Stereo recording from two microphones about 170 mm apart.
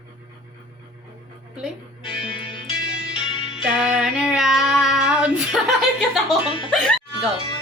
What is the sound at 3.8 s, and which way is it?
Child singing, 5° right (ahead or behind).